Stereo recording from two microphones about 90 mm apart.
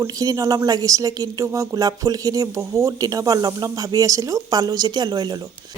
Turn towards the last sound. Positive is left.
turn(degrees=-50)  # may be behind; listen again after turning